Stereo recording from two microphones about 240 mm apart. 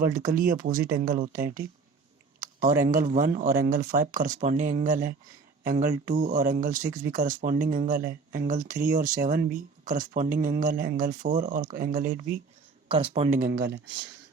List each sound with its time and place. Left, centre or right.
0.0 s speech: right
12.9 s speech: right
13.5 s speech: right